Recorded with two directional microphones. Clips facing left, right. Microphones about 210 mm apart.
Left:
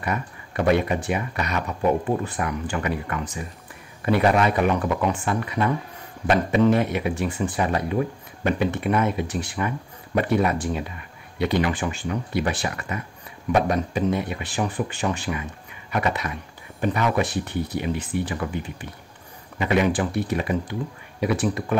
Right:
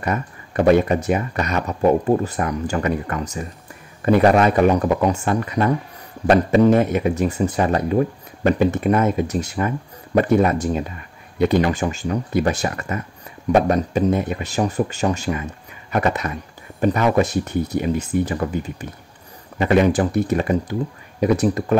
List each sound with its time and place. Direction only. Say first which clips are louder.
0.0 s speech: right 4 dB; 45° right (ahead or behind)